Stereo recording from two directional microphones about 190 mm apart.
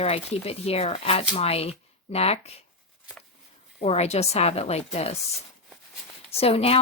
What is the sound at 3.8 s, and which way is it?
Speech, 35° left (ahead or behind).